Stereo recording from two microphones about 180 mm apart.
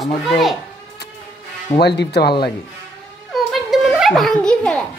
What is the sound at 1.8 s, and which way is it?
Speech, 65° left (ahead or behind).